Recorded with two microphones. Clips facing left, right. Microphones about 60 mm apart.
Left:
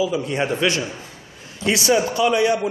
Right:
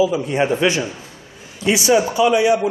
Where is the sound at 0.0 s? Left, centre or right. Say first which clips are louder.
Right 4 dB; right.